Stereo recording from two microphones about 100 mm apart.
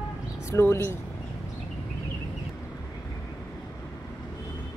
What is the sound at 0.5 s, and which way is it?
Speech, 30° left (ahead or behind).